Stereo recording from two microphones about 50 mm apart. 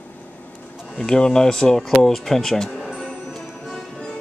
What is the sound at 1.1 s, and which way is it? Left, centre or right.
Speech, centre.